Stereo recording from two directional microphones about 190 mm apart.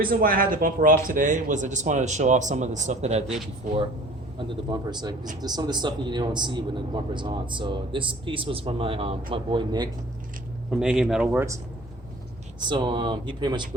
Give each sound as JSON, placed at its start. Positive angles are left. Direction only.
{"t": 0.0, "sound": "a man's voice", "side_deg": -50}
{"t": 4.4, "sound": "a man's voice", "side_deg": -20}
{"t": 10.7, "sound": "speech", "side_deg": -5}
{"t": 12.6, "sound": "a man's voice", "side_deg": -25}